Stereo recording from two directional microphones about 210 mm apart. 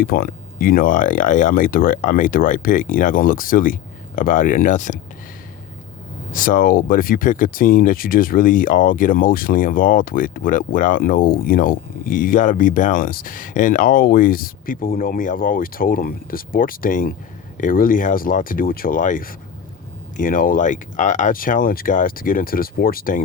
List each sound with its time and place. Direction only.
0.0 s speech: 45° left (ahead or behind)
6.3 s speech: 40° left (ahead or behind)